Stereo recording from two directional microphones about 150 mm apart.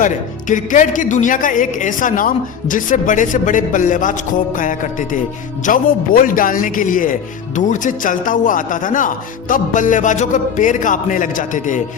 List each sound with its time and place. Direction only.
0.0 s speech: 60° left (ahead or behind)